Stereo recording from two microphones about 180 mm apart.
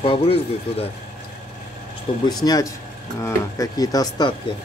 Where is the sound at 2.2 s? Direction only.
20° left (ahead or behind).